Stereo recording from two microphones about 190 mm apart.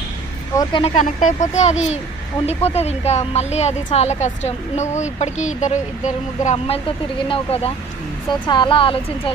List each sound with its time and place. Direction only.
0.6 s speech: 25° left (ahead or behind)
1.0 s speech: 40° left (ahead or behind)